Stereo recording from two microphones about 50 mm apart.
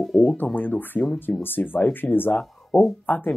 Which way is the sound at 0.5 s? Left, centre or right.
Left.